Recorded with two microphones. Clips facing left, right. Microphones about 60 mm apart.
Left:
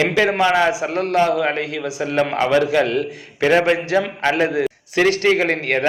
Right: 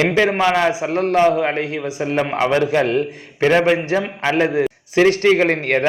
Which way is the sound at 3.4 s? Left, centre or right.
Centre.